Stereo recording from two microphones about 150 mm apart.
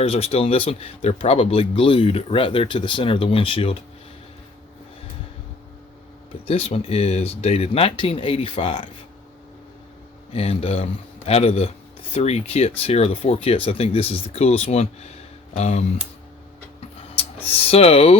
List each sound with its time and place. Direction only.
0.0 s speech: 40° left (ahead or behind)
6.4 s speech: 40° left (ahead or behind)
10.3 s speech: 40° left (ahead or behind)
17.2 s speech: 40° left (ahead or behind)